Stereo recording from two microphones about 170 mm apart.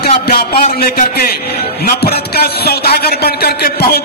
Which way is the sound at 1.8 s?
65° left (ahead or behind).